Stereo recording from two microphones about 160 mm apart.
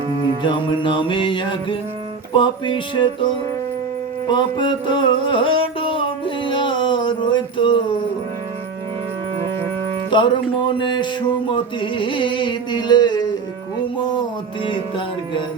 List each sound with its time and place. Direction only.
0.4 s music: 30° left (ahead or behind)
4.3 s music: 30° left (ahead or behind)
10.1 s music: 30° left (ahead or behind)